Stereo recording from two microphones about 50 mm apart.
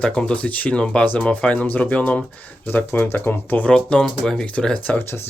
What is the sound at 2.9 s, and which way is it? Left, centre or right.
Speech, left.